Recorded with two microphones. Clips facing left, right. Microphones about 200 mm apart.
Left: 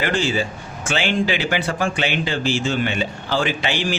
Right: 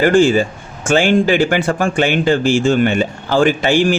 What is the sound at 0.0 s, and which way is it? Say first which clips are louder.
Speech: right 10 dB; 50° right (ahead or behind).